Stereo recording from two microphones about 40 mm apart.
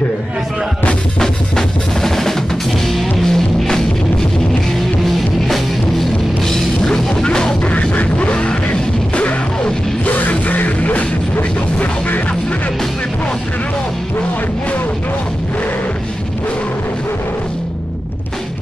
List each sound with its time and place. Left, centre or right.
2.0 s drum: centre
2.9 s music: centre
5.0 s music: centre
6.8 s music: left
7.6 s music: left
10.0 s music: left